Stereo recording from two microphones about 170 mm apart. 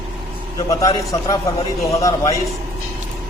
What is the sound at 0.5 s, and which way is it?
Speech, 20° left (ahead or behind).